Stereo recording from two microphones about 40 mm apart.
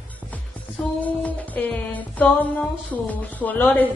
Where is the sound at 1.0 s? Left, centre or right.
Left.